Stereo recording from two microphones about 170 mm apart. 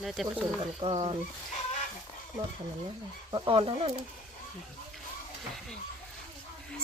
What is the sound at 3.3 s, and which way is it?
Speech, 30° right (ahead or behind).